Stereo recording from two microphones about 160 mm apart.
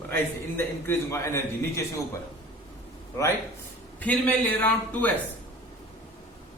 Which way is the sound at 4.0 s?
10° left (ahead or behind).